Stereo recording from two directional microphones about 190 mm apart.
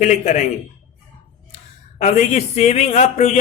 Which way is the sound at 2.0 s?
35° left (ahead or behind).